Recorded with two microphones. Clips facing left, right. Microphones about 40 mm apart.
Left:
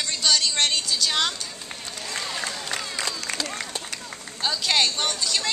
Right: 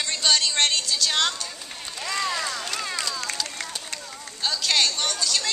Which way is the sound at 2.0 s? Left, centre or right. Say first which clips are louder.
Right 4 dB; right.